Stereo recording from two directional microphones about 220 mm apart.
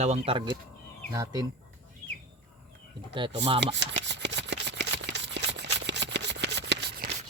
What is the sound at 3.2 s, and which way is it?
Speech, 20° right (ahead or behind).